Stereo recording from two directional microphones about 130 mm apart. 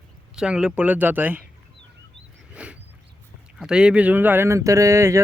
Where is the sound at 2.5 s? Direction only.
10° right (ahead or behind).